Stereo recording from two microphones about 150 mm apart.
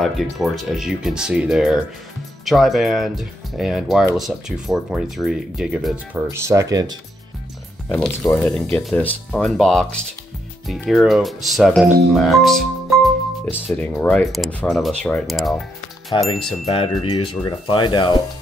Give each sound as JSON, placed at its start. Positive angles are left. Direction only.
{"t": 0.0, "sound": "speech", "side_deg": 0}
{"t": 6.3, "sound": "speech", "side_deg": -20}
{"t": 7.9, "sound": "speech", "side_deg": 5}
{"t": 16.1, "sound": "speech", "side_deg": 30}